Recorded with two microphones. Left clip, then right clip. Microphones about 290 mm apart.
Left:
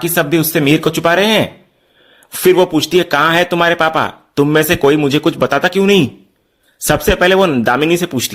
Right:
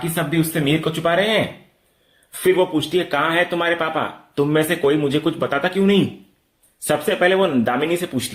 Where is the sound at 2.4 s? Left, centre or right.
Left.